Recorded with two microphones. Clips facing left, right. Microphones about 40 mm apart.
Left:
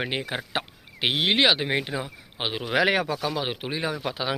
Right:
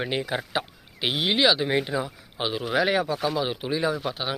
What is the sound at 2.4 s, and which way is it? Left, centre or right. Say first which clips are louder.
Speech: right 1 dB; left.